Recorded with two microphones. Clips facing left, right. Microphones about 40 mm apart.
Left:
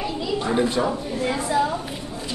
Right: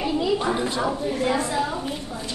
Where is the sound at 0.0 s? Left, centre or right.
Centre.